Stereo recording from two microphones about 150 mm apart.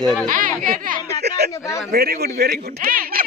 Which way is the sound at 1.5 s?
20° left (ahead or behind).